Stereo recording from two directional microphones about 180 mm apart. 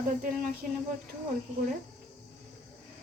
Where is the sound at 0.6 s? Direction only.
50° right (ahead or behind).